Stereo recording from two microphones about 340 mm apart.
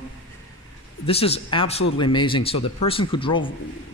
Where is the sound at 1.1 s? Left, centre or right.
Centre.